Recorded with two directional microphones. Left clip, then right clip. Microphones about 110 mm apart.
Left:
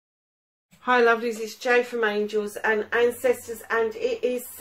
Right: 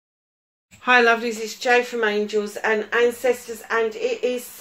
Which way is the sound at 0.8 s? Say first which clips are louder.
Right 3 dB; 20° right (ahead or behind).